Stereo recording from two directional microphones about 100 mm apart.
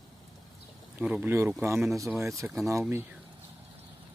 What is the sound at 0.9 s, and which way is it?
Speech, 15° right (ahead or behind).